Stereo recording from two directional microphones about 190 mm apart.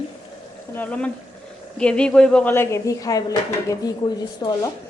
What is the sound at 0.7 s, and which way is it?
A woman's voice, 10° left (ahead or behind).